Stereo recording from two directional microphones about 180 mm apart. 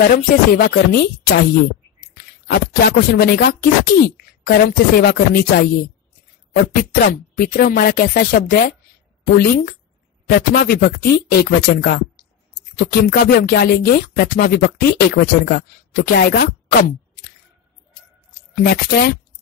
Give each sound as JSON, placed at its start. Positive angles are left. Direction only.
{"t": 0.0, "sound": "speech", "side_deg": 55}
{"t": 2.1, "sound": "speech", "side_deg": 65}
{"t": 18.5, "sound": "speech", "side_deg": 55}